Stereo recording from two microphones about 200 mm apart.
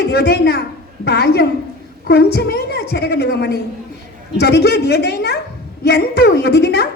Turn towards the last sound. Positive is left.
turn(degrees=55)  # may be behind; listen again after turning